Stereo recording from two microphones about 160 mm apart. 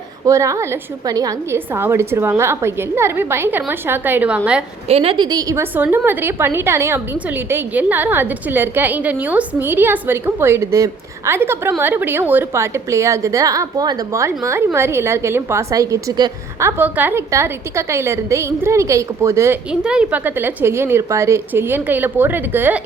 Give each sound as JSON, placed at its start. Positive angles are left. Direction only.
{"t": 0.3, "sound": "a woman's voice", "side_deg": -20}
{"t": 4.9, "sound": "a woman's voice", "side_deg": -40}
{"t": 19.8, "sound": "a woman's voice", "side_deg": -5}